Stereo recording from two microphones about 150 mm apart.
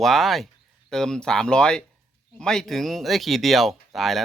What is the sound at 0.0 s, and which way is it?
A man's voice, centre (ahead or behind).